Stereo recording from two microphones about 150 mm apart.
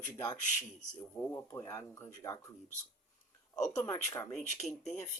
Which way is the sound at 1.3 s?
20° left (ahead or behind).